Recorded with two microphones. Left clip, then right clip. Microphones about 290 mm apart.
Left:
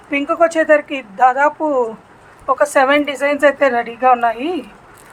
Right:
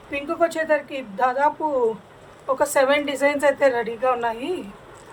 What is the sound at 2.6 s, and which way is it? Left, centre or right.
A woman's voice, centre.